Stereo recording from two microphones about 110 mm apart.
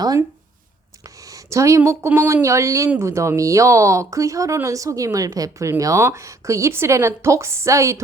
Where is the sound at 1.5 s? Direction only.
30° right (ahead or behind).